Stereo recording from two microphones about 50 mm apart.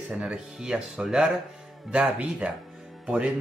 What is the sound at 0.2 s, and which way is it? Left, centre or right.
Speech, centre.